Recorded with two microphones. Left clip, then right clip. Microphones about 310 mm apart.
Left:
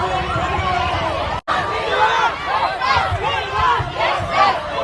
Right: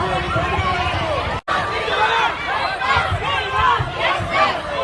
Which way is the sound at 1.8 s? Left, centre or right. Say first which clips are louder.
Left 2 dB; left.